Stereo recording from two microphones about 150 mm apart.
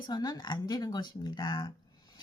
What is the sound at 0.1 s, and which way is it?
A woman's voice, 25° left (ahead or behind).